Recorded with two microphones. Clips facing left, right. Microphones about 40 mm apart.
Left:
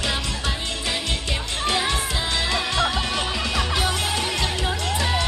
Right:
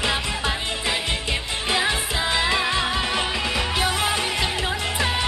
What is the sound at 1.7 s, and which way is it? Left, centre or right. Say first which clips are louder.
Music: right 2 dB; centre.